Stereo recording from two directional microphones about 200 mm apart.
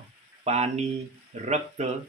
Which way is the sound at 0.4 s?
35° right (ahead or behind).